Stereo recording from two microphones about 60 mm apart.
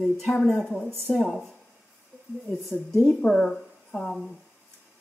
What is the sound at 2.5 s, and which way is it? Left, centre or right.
A woman's voice, centre.